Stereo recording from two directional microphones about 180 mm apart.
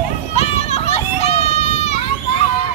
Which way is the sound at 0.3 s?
35° left (ahead or behind).